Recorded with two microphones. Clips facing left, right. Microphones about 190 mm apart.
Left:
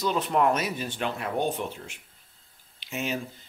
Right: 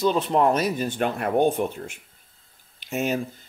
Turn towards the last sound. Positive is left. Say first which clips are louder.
# right 6 dB
turn(degrees=-45)  # may be behind; listen again after turning